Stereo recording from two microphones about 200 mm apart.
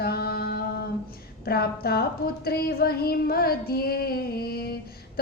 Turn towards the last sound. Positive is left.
turn(degrees=50)  # may be behind; listen again after turning